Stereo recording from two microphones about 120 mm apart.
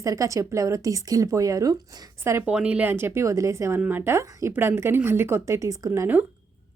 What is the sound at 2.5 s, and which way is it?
A woman's voice, 10° right (ahead or behind).